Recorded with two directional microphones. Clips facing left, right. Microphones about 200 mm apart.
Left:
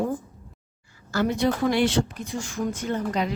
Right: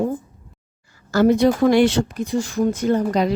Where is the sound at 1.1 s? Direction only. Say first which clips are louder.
Right 8 dB; 40° right (ahead or behind).